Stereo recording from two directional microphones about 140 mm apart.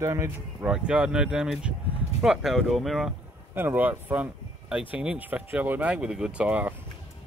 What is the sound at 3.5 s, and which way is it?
Speech, 15° right (ahead or behind).